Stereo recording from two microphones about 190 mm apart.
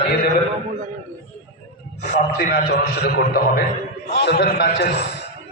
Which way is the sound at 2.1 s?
40° left (ahead or behind).